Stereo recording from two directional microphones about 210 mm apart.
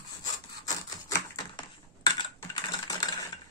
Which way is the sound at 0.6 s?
15° left (ahead or behind).